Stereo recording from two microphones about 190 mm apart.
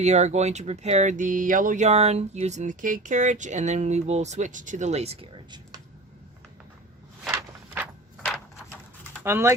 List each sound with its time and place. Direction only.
0.0 s speech: 35° right (ahead or behind)
7.3 s walk: 10° right (ahead or behind)
9.2 s speech: 15° right (ahead or behind)